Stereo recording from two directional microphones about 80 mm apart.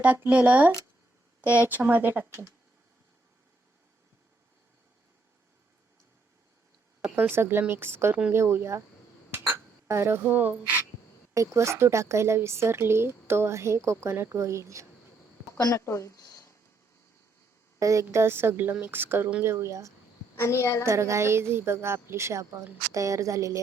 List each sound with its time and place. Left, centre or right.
0.0 s a woman's voice: centre
7.2 s a woman's voice: right
9.5 s a sound: right
10.2 s a woman's voice: centre
11.3 s speech: right
15.5 s speech: left
17.7 s a woman's voice: right
20.4 s a woman's voice: left
20.8 s speech: right